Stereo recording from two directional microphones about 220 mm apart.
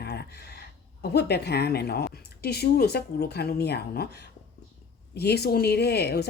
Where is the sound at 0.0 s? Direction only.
45° left (ahead or behind).